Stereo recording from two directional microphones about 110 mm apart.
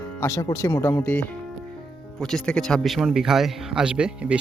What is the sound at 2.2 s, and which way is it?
Speech, 5° left (ahead or behind).